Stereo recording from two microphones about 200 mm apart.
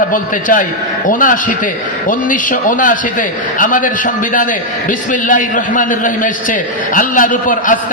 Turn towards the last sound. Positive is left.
turn(degrees=40)  # may be behind; listen again after turning